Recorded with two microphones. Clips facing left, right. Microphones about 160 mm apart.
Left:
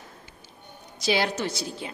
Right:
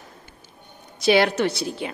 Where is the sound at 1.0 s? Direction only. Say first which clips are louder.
Right 7 dB; 65° right (ahead or behind).